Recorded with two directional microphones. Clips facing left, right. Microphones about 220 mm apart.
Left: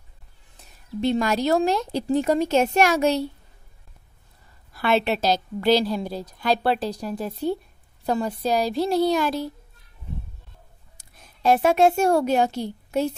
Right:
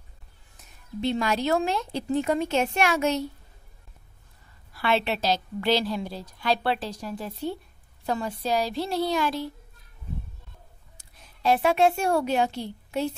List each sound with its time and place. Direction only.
1.0 s a woman's voice: 45° left (ahead or behind)
4.7 s a woman's voice: 45° left (ahead or behind)
11.0 s a woman's voice: 45° left (ahead or behind)